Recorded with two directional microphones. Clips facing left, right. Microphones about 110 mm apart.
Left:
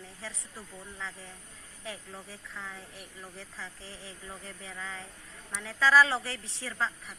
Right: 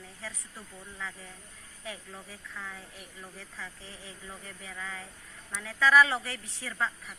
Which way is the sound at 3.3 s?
30° left (ahead or behind).